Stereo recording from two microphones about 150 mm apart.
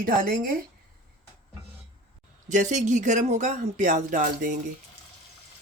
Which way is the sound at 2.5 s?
55° right (ahead or behind).